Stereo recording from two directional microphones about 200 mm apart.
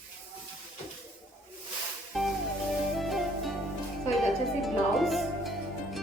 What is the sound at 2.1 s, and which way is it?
Music, centre (ahead or behind).